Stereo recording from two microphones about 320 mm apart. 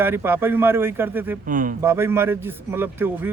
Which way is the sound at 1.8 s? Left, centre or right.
Centre.